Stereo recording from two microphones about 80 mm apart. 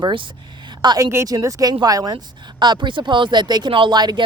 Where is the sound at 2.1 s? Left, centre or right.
Right.